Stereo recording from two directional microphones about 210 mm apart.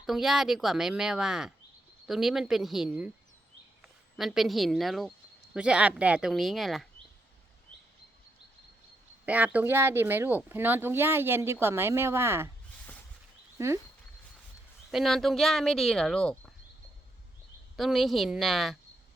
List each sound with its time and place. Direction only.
0.0 s speech: centre (ahead or behind)
4.2 s speech: centre (ahead or behind)
9.2 s speech: 5° right (ahead or behind)
14.8 s speech: centre (ahead or behind)
17.7 s speech: centre (ahead or behind)